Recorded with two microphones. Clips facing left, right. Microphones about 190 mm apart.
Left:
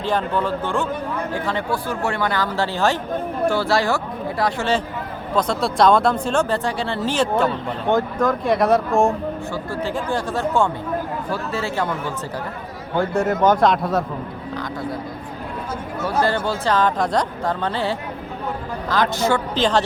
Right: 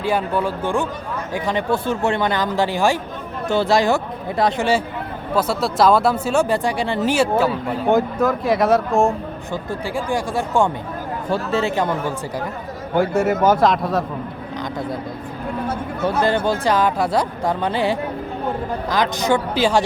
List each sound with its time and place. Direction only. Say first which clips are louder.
0.0 s speech: right 1 dB; 10° right (ahead or behind)
9.5 s speech: even; 10° right (ahead or behind)
13.0 s speech: right 1 dB; 5° right (ahead or behind)
16.0 s speech: right 2 dB; 20° right (ahead or behind)